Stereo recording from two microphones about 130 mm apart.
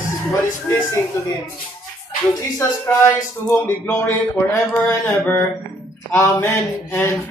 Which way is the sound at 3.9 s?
15° left (ahead or behind).